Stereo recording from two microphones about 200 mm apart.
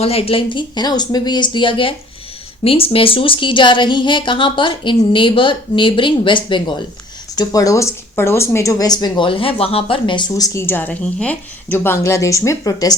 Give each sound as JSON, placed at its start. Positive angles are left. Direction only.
{"t": 0.0, "sound": "speech", "side_deg": 30}